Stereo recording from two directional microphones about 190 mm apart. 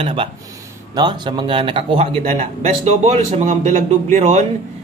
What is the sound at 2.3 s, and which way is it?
Speech, 40° right (ahead or behind).